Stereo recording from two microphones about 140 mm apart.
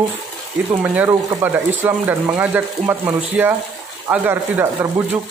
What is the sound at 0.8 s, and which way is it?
Speech, 10° right (ahead or behind).